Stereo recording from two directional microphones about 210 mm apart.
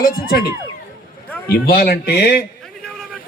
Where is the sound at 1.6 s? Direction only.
45° left (ahead or behind).